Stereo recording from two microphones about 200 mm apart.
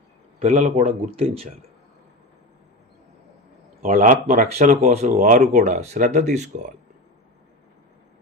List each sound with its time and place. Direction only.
0.3 s speech: 35° right (ahead or behind)
3.8 s speech: 40° right (ahead or behind)